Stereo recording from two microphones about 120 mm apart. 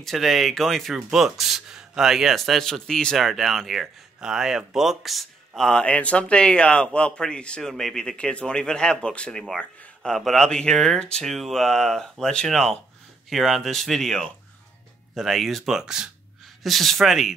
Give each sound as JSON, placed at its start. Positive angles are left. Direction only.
{"t": 0.0, "sound": "speech", "side_deg": 0}